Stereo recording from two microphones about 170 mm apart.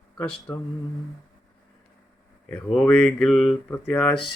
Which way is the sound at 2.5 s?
5° left (ahead or behind).